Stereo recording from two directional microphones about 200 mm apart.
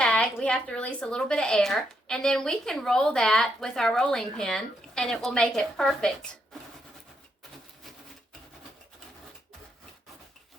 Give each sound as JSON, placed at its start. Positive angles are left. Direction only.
{"t": 0.0, "sound": "a woman's voice", "side_deg": 5}